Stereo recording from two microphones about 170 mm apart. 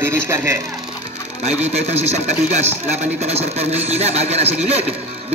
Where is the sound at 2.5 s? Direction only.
40° right (ahead or behind).